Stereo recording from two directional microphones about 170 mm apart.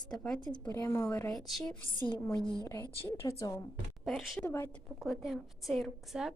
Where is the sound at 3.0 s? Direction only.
15° left (ahead or behind).